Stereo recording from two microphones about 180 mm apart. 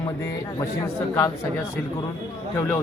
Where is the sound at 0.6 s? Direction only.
15° left (ahead or behind).